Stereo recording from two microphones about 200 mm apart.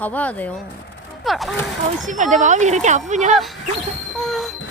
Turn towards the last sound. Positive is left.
turn(degrees=0)  # may be behind; listen again after turning